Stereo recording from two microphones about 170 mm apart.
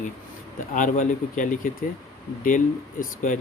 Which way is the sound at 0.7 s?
50° left (ahead or behind).